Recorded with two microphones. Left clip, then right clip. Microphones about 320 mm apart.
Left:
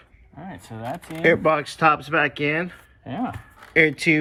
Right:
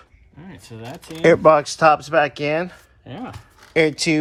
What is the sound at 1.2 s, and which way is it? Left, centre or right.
A man's voice, centre.